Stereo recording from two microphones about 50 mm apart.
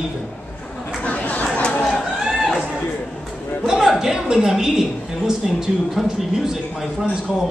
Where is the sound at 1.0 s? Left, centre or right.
Left.